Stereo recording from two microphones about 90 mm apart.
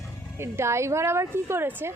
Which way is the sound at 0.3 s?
30° right (ahead or behind).